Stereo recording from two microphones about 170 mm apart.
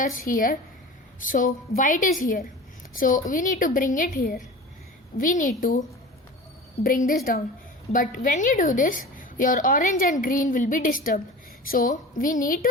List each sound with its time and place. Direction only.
0.0 s a woman's voice: 55° left (ahead or behind)
6.8 s a woman's voice: 55° left (ahead or behind)